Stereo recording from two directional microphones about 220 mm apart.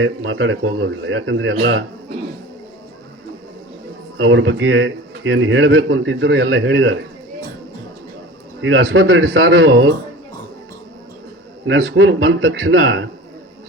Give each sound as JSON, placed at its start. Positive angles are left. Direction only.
{"t": 0.0, "sound": "a man's voice", "side_deg": -65}
{"t": 4.2, "sound": "a man's voice", "side_deg": -60}
{"t": 8.6, "sound": "a man's voice", "side_deg": -70}
{"t": 11.6, "sound": "a man's voice", "side_deg": -65}